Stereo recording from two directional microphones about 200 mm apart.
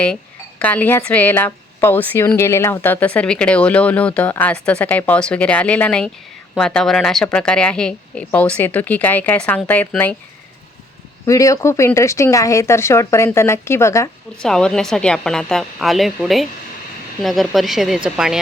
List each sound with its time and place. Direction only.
0.6 s a woman's voice: 5° left (ahead or behind)
11.3 s a woman's voice: 15° left (ahead or behind)
14.4 s speech: 5° left (ahead or behind)